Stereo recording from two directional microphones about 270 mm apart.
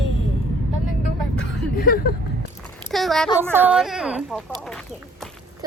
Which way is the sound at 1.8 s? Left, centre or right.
Left.